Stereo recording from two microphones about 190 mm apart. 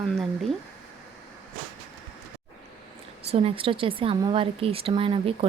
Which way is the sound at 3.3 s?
30° right (ahead or behind).